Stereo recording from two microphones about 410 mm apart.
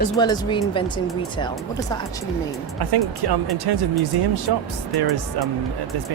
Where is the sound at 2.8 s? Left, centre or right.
Right.